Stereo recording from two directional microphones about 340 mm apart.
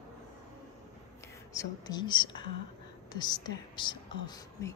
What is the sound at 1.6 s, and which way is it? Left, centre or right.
A woman's voice, centre.